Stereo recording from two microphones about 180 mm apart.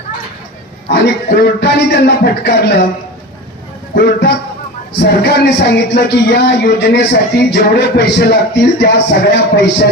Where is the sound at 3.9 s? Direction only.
60° left (ahead or behind).